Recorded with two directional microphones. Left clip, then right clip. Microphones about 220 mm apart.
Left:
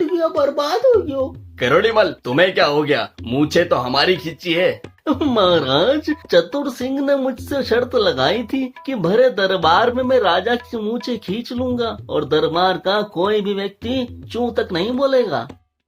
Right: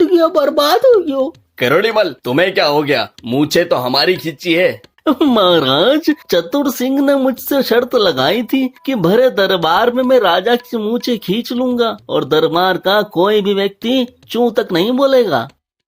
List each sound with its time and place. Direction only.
0.0 s speech: 35° right (ahead or behind)
1.5 s speech: 25° right (ahead or behind)
5.0 s speech: 30° right (ahead or behind)